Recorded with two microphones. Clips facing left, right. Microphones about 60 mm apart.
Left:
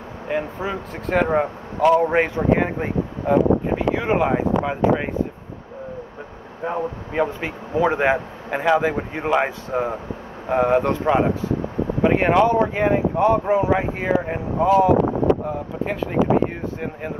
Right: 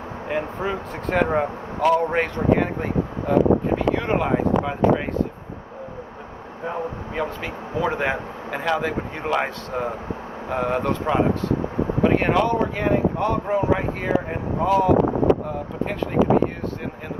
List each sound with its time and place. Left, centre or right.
0.3 s speech: centre
6.6 s speech: centre